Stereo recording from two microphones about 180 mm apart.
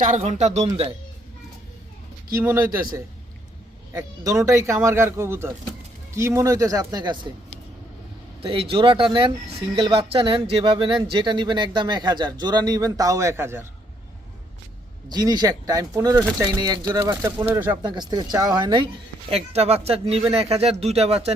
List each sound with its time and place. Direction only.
0.0 s speech: 40° right (ahead or behind)
3.9 s speech: 15° right (ahead or behind)
8.4 s speech: 30° right (ahead or behind); by 13.7 s 15° right (ahead or behind)
15.1 s speech: 20° right (ahead or behind)
17.5 s speech: 15° right (ahead or behind)
17.8 s speech: 25° right (ahead or behind)
19.3 s speech: 35° right (ahead or behind)